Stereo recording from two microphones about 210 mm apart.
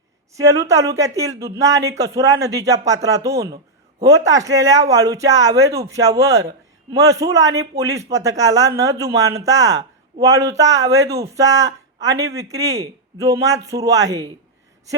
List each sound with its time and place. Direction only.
0.3 s speech: 15° right (ahead or behind)